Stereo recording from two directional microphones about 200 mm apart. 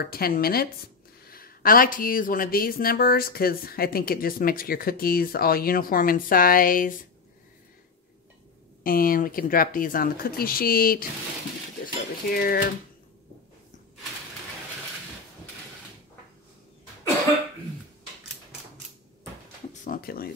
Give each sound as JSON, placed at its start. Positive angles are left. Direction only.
{"t": 0.0, "sound": "speech", "side_deg": 50}
{"t": 8.8, "sound": "speech", "side_deg": 45}
{"t": 19.7, "sound": "a sound", "side_deg": 40}